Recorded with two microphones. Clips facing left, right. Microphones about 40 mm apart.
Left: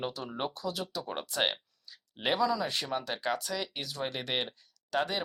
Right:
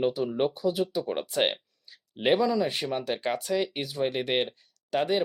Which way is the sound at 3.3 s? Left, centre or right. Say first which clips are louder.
Right 6 dB; right.